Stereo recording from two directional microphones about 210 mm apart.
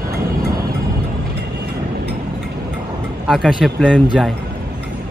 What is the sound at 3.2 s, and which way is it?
Speech, centre (ahead or behind).